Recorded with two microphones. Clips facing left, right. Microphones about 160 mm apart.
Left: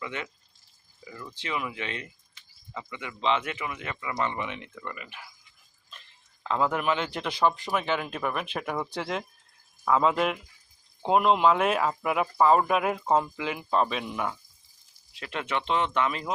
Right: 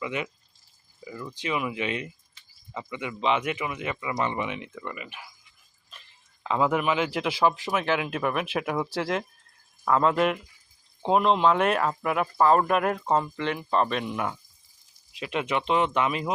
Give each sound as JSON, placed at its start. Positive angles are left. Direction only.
{"t": 0.0, "sound": "speech", "side_deg": -15}
{"t": 6.4, "sound": "speech", "side_deg": -5}
{"t": 15.1, "sound": "speech", "side_deg": -15}